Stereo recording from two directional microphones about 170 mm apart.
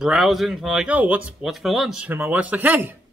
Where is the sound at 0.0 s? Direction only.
Centre (ahead or behind).